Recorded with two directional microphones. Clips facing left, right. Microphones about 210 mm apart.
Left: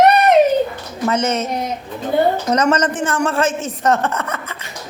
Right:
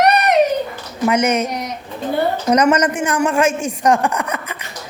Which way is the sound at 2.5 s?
10° right (ahead or behind).